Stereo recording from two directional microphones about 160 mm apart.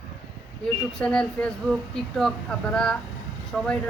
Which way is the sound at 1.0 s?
5° left (ahead or behind).